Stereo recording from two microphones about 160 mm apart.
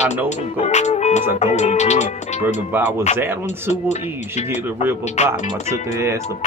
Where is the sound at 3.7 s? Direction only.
45° left (ahead or behind).